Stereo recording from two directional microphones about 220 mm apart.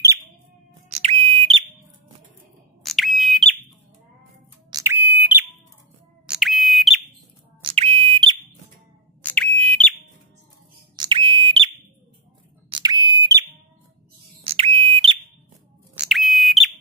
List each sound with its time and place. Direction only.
0.8 s whistle: 30° right (ahead or behind)
2.8 s a sound: centre (ahead or behind)
4.6 s smoke detector: 15° right (ahead or behind)
6.2 s a sound: centre (ahead or behind)
7.6 s smoke detector: 30° right (ahead or behind)
9.2 s bird: 5° left (ahead or behind)
11.0 s a sound: 20° right (ahead or behind)
12.6 s smoke detector: 20° right (ahead or behind)
14.4 s smoke detector: 30° right (ahead or behind)
15.9 s bird: centre (ahead or behind)